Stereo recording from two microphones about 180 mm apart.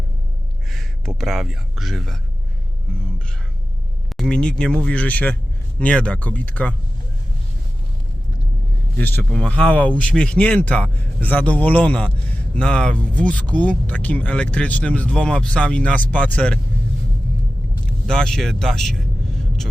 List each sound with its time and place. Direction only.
0.7 s speech: centre (ahead or behind)
4.1 s speech: centre (ahead or behind)
9.0 s speech: 10° left (ahead or behind)
17.8 s vehicle: 5° left (ahead or behind)